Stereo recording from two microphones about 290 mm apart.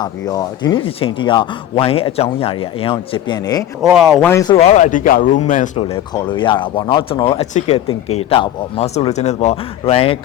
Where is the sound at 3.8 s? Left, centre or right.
Centre.